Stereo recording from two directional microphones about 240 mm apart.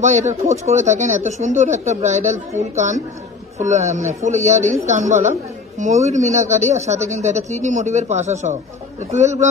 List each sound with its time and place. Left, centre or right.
0.0 s a woman's voice: right
3.5 s a woman's voice: right